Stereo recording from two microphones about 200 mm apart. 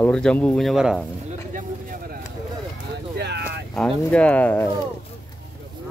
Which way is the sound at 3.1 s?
55° right (ahead or behind).